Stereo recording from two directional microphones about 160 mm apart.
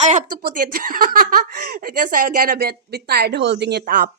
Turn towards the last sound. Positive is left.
turn(degrees=-75)  # may be behind; listen again after turning